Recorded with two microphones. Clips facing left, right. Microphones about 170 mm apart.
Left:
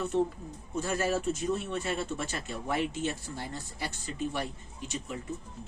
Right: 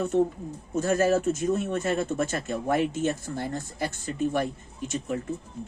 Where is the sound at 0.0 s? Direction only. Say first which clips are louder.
Right 5 dB; 50° right (ahead or behind).